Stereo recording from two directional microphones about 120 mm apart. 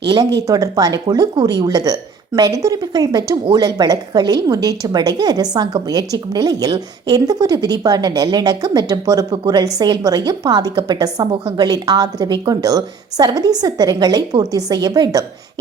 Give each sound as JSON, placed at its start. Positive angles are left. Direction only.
{"t": 0.1, "sound": "a woman's voice", "side_deg": -35}